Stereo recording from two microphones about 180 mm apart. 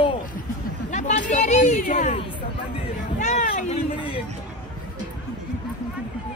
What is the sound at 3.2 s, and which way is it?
Speech, 40° left (ahead or behind).